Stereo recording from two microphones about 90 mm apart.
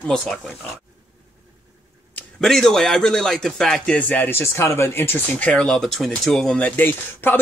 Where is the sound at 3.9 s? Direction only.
20° left (ahead or behind).